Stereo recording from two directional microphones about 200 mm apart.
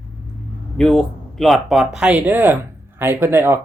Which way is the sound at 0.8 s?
5° left (ahead or behind).